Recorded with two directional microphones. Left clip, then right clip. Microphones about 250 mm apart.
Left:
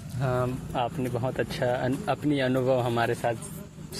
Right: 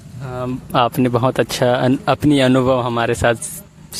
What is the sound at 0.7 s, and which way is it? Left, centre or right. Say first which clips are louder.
Speech: right 13 dB; right.